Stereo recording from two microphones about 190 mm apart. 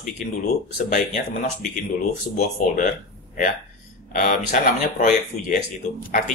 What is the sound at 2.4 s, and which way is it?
Speech, 45° left (ahead or behind).